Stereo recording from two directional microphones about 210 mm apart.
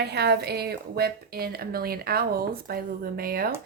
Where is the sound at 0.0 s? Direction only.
50° right (ahead or behind).